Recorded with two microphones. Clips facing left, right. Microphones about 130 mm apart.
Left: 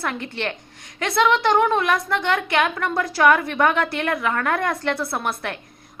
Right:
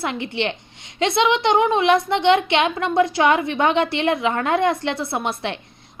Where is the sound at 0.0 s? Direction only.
20° right (ahead or behind).